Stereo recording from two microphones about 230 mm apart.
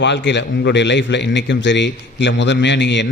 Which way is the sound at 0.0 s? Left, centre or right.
Left.